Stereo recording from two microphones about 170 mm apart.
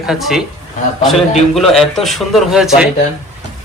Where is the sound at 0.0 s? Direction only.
Centre (ahead or behind).